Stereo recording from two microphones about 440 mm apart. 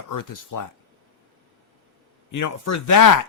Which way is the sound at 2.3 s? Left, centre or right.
Left.